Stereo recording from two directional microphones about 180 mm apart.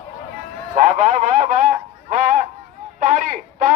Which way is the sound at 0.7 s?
40° right (ahead or behind).